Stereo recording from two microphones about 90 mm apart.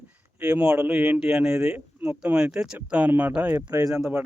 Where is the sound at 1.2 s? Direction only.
5° right (ahead or behind).